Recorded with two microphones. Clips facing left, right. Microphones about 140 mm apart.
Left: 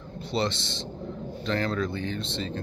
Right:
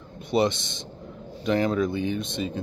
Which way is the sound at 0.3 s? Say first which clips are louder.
Right 5 dB; 15° right (ahead or behind).